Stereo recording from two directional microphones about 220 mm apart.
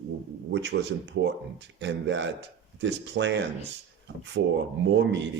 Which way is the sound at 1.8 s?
55° right (ahead or behind).